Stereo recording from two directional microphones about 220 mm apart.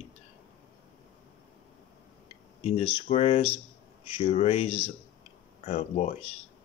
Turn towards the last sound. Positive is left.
turn(degrees=35)  # may be behind; listen again after turning